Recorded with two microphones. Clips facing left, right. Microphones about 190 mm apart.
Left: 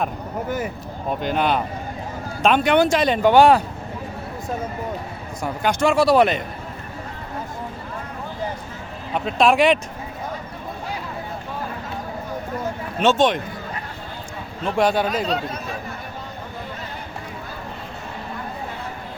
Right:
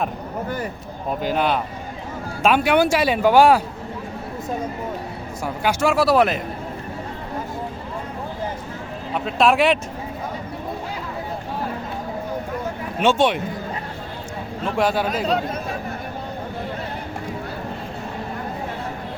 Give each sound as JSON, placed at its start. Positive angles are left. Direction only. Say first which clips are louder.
{"t": 1.2, "sound": "a man's voice", "louder": "even", "side_deg": -5}
{"t": 5.4, "sound": "a man's voice", "louder": "left 1 dB", "side_deg": -5}
{"t": 9.1, "sound": "a man's voice", "louder": "left 1 dB", "side_deg": 0}
{"t": 13.0, "sound": "speech", "louder": "even", "side_deg": -10}
{"t": 14.8, "sound": "a man's voice", "louder": "left 1 dB", "side_deg": -5}
{"t": 15.3, "sound": "speech", "louder": "right 3 dB", "side_deg": -50}